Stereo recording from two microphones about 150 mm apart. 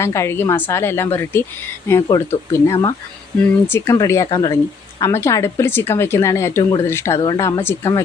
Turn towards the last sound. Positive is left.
turn(degrees=15)  # may be behind; listen again after turning